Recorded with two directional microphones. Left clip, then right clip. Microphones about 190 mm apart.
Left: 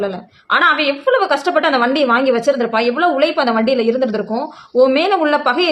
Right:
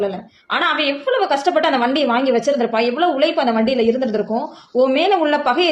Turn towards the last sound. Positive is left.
turn(degrees=20)  # may be behind; listen again after turning